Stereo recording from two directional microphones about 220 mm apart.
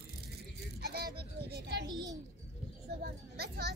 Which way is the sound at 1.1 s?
50° right (ahead or behind).